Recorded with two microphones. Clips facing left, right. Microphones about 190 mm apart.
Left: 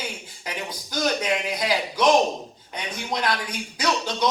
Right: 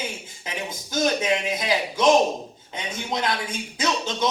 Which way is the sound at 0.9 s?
25° right (ahead or behind).